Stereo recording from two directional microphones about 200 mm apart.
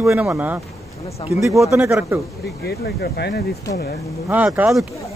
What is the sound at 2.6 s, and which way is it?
Speech, 55° left (ahead or behind).